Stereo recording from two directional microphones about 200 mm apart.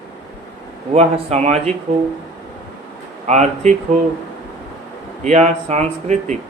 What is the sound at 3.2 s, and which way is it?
Speech, 35° right (ahead or behind).